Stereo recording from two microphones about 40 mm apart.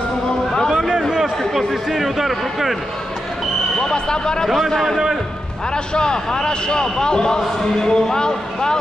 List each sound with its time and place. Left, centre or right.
0.7 s a sound: centre
1.4 s a sound: centre
1.9 s speech: centre
3.8 s speech: centre
4.5 s speech: centre
5.9 s speech: centre